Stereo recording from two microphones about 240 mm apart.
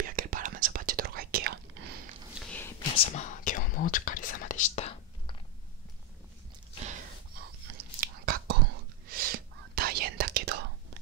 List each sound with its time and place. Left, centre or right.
0.0 s whispering: right
2.3 s a sound: centre
3.1 s whispering: left
7.7 s whispering: right